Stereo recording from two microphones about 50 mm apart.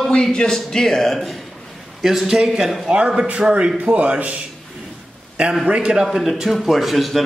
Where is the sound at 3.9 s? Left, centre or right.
Right.